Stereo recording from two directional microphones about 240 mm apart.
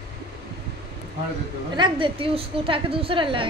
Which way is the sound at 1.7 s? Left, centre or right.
Centre.